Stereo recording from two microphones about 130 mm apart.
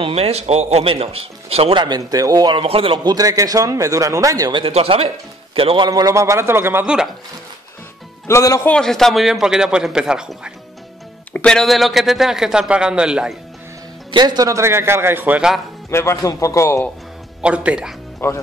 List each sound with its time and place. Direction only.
0.0 s a man's voice: 50° right (ahead or behind)
1.8 s speech: 30° right (ahead or behind)
2.6 s a man's voice: 45° right (ahead or behind)
3.0 s speech: 30° right (ahead or behind)
4.7 s a man's voice: 50° right (ahead or behind)
5.9 s speech: 25° right (ahead or behind)
8.3 s speech: 20° left (ahead or behind)
8.6 s a man's voice: 5° left (ahead or behind)
11.3 s a man's voice: 5° left (ahead or behind)
14.1 s speech: 30° right (ahead or behind); by 15.5 s 10° right (ahead or behind)
15.9 s speech: 20° left (ahead or behind)
17.4 s speech: 10° right (ahead or behind)
18.2 s speech: 20° left (ahead or behind)